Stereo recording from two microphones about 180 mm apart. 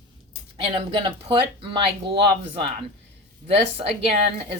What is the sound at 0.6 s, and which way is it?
Speech, 30° right (ahead or behind).